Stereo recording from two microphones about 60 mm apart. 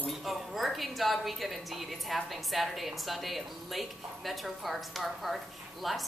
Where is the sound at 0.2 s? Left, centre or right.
Centre.